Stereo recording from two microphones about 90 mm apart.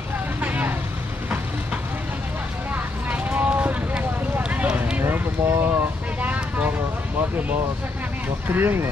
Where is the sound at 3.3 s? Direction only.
15° right (ahead or behind).